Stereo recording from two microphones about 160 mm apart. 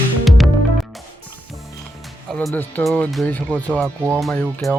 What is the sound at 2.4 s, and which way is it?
Speech, 10° left (ahead or behind).